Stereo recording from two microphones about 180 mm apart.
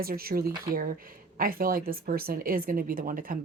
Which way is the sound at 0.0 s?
55° right (ahead or behind).